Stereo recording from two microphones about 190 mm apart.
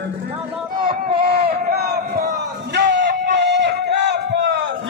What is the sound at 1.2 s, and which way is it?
Crowd, 55° right (ahead or behind).